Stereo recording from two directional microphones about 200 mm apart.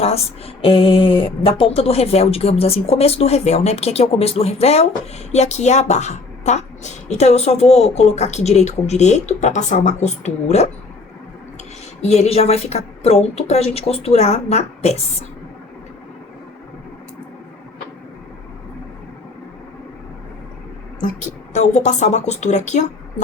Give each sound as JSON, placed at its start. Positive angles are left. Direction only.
{"t": 0.0, "sound": "speech", "side_deg": 30}
{"t": 12.0, "sound": "speech", "side_deg": 35}
{"t": 21.5, "sound": "speech", "side_deg": 35}